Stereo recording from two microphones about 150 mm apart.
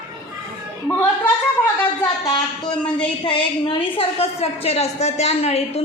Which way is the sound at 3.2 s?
35° left (ahead or behind).